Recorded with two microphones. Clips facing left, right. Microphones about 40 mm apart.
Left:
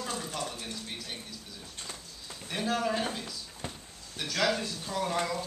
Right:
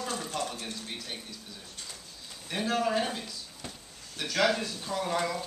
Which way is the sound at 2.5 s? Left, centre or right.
Centre.